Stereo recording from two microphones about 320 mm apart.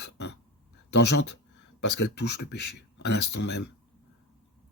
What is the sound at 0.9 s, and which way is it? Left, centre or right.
Speech, left.